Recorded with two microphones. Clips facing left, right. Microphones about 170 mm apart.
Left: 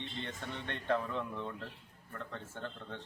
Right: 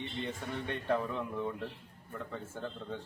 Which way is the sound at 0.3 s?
10° right (ahead or behind).